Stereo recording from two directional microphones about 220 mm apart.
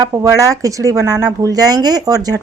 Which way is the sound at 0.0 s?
15° right (ahead or behind).